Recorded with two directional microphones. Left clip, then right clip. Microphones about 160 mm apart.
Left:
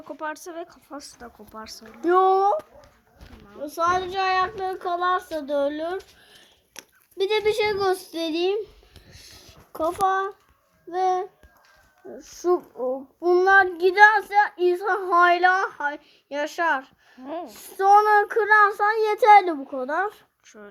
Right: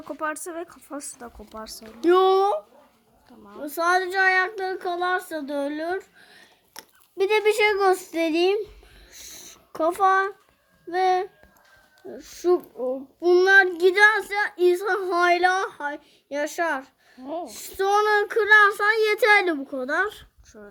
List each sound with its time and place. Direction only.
0.0 s a woman's voice: centre (ahead or behind)
2.1 s speech: 35° right (ahead or behind)
3.6 s speech: 30° right (ahead or behind)
10.0 s speech: 25° right (ahead or behind)
10.9 s a child's voice: 15° right (ahead or behind)
12.1 s a woman's voice: centre (ahead or behind)
13.2 s a child's voice: 10° right (ahead or behind)